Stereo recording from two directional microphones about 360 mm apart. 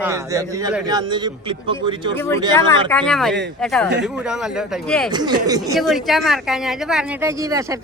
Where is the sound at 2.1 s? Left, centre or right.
Centre.